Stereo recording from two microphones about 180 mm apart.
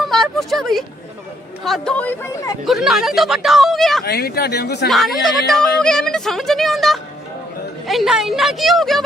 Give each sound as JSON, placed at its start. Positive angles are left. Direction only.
{"t": 0.0, "sound": "a sound", "side_deg": 0}
{"t": 1.6, "sound": "speech", "side_deg": 0}
{"t": 4.0, "sound": "speech", "side_deg": 60}
{"t": 4.9, "sound": "speech", "side_deg": 0}